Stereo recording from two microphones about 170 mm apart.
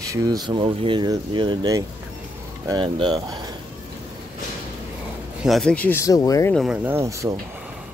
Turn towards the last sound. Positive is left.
turn(degrees=-20)  # may be behind; listen again after turning